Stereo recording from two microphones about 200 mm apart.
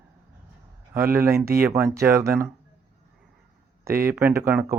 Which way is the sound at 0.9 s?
10° right (ahead or behind).